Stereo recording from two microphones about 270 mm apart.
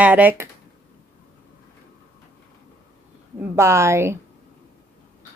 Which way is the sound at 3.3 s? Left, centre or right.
Centre.